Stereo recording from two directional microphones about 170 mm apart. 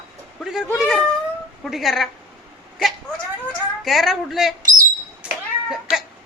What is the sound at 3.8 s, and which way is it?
Speech, centre (ahead or behind).